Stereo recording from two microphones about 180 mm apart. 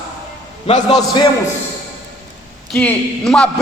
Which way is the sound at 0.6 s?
40° left (ahead or behind).